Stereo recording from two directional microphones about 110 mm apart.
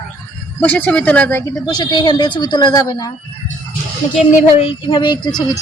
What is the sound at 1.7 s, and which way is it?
Speech, 40° left (ahead or behind).